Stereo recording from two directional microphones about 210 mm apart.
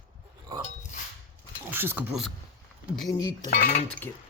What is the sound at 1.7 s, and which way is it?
Speech, 10° right (ahead or behind).